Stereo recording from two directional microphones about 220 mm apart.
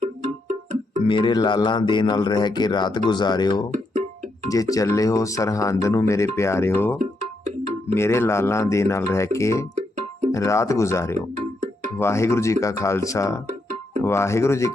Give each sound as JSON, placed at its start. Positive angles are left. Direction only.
{"t": 0.0, "sound": "music", "side_deg": -30}
{"t": 1.0, "sound": "speech", "side_deg": 20}
{"t": 7.0, "sound": "music", "side_deg": -30}
{"t": 7.9, "sound": "speech", "side_deg": 10}
{"t": 11.3, "sound": "music", "side_deg": -30}
{"t": 11.9, "sound": "speech", "side_deg": 10}
{"t": 13.5, "sound": "music", "side_deg": -30}
{"t": 14.0, "sound": "speech", "side_deg": 10}